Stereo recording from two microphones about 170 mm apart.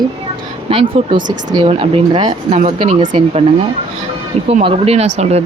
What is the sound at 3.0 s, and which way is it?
Speech, 30° right (ahead or behind).